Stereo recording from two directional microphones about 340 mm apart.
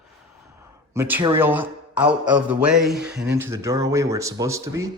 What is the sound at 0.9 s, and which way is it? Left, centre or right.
Speech, centre.